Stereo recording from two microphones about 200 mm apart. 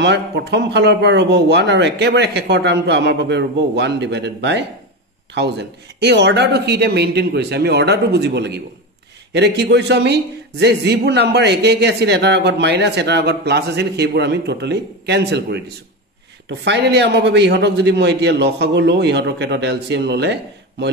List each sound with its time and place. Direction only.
0.0 s a man's voice: 60° right (ahead or behind)